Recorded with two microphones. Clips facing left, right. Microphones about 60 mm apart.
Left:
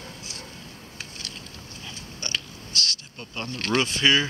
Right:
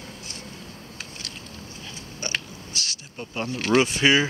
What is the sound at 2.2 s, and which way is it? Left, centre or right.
Creak, centre.